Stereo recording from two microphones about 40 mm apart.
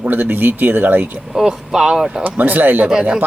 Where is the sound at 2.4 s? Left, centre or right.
Right.